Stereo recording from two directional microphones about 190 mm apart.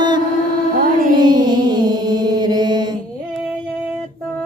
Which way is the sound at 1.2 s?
25° right (ahead or behind).